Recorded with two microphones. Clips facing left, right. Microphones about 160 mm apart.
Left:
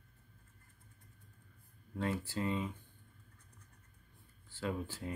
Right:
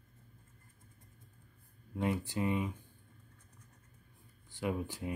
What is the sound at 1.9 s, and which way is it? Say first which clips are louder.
Speech: right 3 dB; 15° right (ahead or behind).